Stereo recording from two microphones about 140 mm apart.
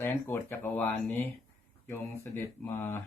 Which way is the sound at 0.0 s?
15° left (ahead or behind).